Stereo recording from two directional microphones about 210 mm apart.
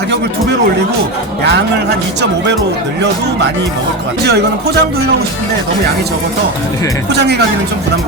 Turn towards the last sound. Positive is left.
turn(degrees=-50)  # may be behind; listen again after turning